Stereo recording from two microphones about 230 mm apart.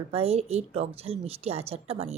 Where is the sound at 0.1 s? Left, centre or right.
Right.